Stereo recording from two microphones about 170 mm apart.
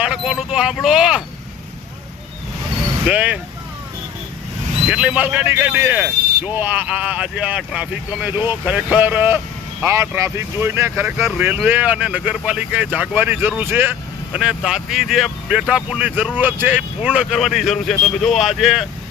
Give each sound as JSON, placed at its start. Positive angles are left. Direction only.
{"t": 0.0, "sound": "speech", "side_deg": -5}
{"t": 3.1, "sound": "speech", "side_deg": -10}
{"t": 4.9, "sound": "speech", "side_deg": -5}